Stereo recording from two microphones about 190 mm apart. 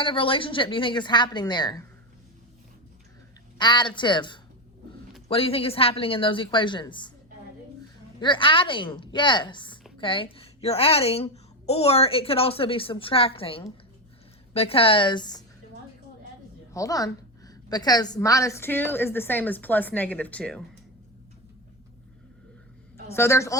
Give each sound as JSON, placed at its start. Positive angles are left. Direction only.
{"t": 0.0, "sound": "a woman's voice", "side_deg": 25}
{"t": 3.6, "sound": "a woman's voice", "side_deg": 25}
{"t": 8.2, "sound": "a woman's voice", "side_deg": 25}
{"t": 16.7, "sound": "a woman's voice", "side_deg": 20}
{"t": 23.1, "sound": "a woman's voice", "side_deg": 15}